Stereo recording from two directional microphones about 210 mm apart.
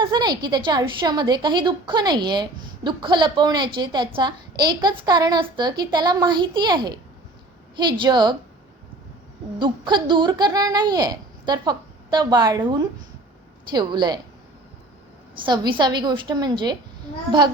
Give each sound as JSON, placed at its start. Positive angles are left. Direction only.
{"t": 0.0, "sound": "a woman's voice", "side_deg": -20}
{"t": 9.6, "sound": "a woman's voice", "side_deg": -20}
{"t": 15.4, "sound": "a woman's voice", "side_deg": -20}